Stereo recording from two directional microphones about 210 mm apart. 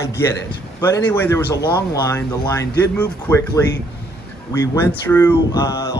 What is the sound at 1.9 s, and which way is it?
Speech, 15° left (ahead or behind).